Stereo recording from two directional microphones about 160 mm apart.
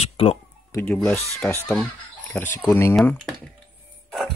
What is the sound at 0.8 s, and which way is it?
Speech, 10° left (ahead or behind).